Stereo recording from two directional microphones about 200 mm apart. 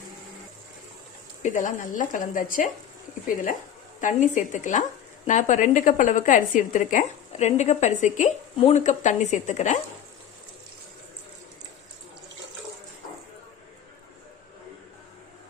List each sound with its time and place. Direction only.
1.4 s speech: 40° left (ahead or behind)
4.0 s speech: 40° left (ahead or behind)